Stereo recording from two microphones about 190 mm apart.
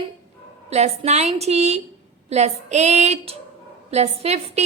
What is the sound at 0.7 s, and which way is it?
A woman's voice, 35° right (ahead or behind).